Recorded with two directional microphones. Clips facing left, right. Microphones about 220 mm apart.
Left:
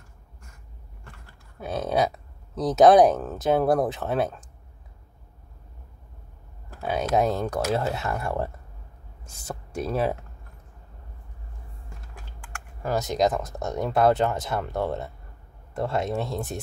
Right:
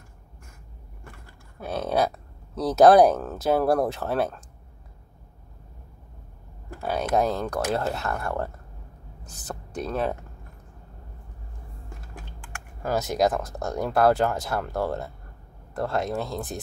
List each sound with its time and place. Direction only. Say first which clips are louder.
1.6 s speech: even; centre (ahead or behind)
6.8 s speech: left 1 dB; centre (ahead or behind)
12.8 s speech: even; 5° right (ahead or behind)
13.4 s speech: even; 20° left (ahead or behind)
13.7 s speech: even; centre (ahead or behind)